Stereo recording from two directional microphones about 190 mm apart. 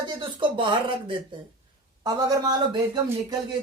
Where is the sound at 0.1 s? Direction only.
25° right (ahead or behind).